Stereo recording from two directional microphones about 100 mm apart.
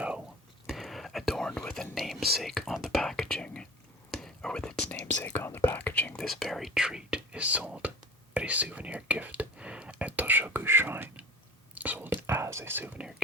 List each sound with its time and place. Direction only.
0.7 s whispering: centre (ahead or behind)
5.2 s speech: 20° left (ahead or behind)
6.2 s speech: centre (ahead or behind); by 11.3 s 20° right (ahead or behind)
11.8 s whispering: 15° right (ahead or behind)
13.0 s speech: 5° right (ahead or behind)